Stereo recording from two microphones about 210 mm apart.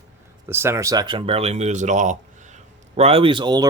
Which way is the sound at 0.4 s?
10° right (ahead or behind).